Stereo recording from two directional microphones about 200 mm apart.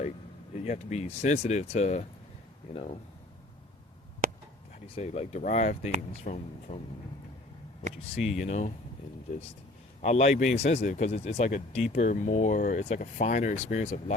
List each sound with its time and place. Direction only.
0.5 s speech: 35° left (ahead or behind)
4.2 s a sound: 45° right (ahead or behind)
4.9 s speech: 35° left (ahead or behind)
8.2 s speech: centre (ahead or behind)
8.4 s speech: 35° left (ahead or behind)
10.0 s speech: 35° left (ahead or behind)